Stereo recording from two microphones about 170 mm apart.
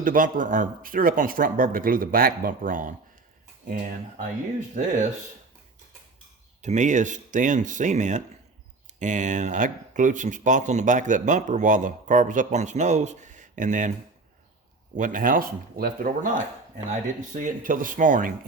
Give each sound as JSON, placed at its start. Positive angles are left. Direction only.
{"t": 0.0, "sound": "speech", "side_deg": -55}
{"t": 4.8, "sound": "speech", "side_deg": -50}
{"t": 6.6, "sound": "speech", "side_deg": -45}
{"t": 14.9, "sound": "speech", "side_deg": -50}